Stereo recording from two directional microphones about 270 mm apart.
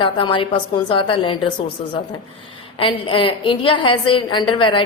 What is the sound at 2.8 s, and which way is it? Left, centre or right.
A woman's voice, centre.